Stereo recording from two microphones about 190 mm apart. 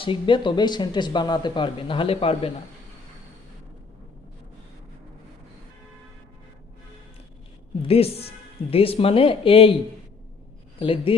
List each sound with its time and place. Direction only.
0.0 s speech: 25° left (ahead or behind)
7.8 s speech: 30° left (ahead or behind)
10.8 s a man's voice: 30° left (ahead or behind)